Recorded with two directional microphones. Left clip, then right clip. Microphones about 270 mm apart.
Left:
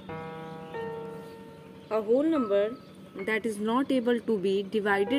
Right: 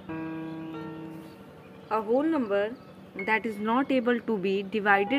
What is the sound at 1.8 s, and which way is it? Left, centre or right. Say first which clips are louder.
Speech: even; centre.